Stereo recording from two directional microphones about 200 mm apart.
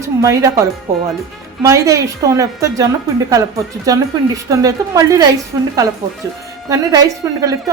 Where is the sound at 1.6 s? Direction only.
15° right (ahead or behind).